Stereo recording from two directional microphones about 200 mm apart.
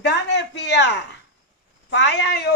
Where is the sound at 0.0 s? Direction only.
60° left (ahead or behind).